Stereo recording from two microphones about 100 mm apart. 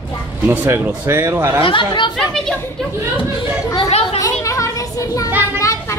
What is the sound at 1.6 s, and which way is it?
Speech, 55° left (ahead or behind).